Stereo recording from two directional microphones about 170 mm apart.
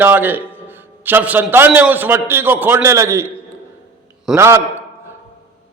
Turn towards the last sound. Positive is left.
turn(degrees=-15)  # may be behind; listen again after turning